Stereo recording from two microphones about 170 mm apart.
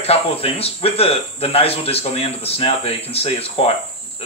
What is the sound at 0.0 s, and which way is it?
Speech, 35° left (ahead or behind).